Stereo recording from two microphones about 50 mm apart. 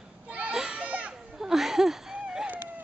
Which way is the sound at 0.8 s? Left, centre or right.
Right.